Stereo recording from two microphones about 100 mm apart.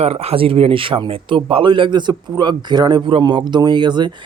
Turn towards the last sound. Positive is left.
turn(degrees=-45)  # may be behind; listen again after turning